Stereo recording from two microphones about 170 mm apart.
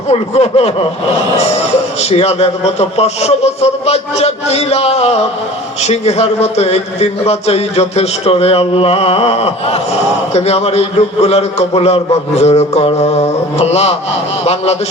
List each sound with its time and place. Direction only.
0.1 s a man's voice: 40° left (ahead or behind)
2.0 s a man's voice: 40° left (ahead or behind)